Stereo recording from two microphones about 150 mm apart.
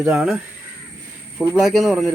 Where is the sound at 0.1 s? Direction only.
5° right (ahead or behind).